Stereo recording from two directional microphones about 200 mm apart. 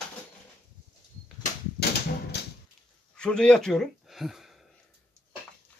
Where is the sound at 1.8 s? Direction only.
50° left (ahead or behind).